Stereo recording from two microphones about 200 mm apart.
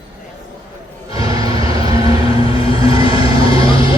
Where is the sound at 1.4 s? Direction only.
25° left (ahead or behind).